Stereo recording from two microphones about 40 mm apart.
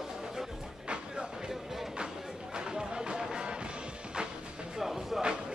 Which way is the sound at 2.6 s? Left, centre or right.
Centre.